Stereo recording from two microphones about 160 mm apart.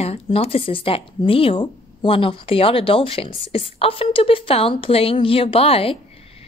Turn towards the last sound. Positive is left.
turn(degrees=35)  # may be behind; listen again after turning